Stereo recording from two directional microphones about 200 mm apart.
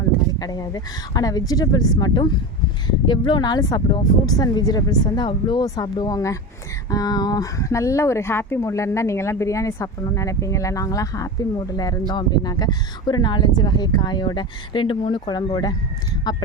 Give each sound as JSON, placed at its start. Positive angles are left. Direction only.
{"t": 0.3, "sound": "speech", "side_deg": 20}